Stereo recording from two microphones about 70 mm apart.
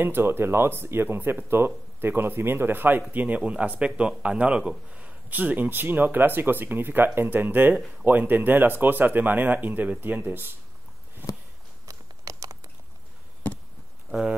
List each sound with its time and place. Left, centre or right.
0.0 s speech: right
11.8 s computer keyboard: right